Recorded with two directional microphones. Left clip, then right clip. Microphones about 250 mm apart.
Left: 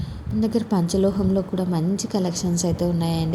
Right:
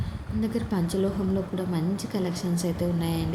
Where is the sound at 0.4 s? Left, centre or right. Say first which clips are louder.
Left 6 dB; centre.